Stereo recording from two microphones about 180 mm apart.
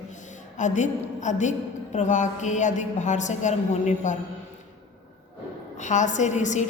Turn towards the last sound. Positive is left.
turn(degrees=40)  # may be behind; listen again after turning